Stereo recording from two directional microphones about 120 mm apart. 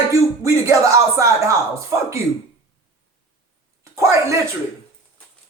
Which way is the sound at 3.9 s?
25° right (ahead or behind).